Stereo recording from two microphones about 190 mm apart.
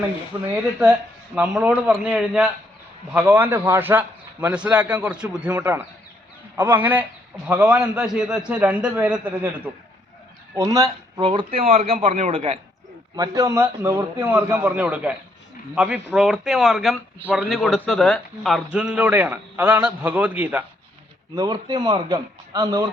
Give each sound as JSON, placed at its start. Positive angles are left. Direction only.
{"t": 0.4, "sound": "a man's voice", "side_deg": -10}
{"t": 10.5, "sound": "a man's voice", "side_deg": -20}
{"t": 13.1, "sound": "a man's voice", "side_deg": -15}
{"t": 21.3, "sound": "a man's voice", "side_deg": -20}